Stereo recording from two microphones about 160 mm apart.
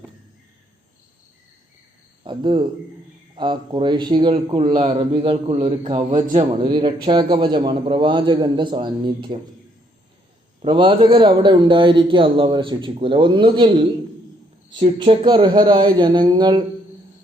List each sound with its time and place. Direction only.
2.2 s a man's voice: 30° right (ahead or behind)
10.6 s a man's voice: 30° right (ahead or behind)
14.9 s a man's voice: 30° right (ahead or behind)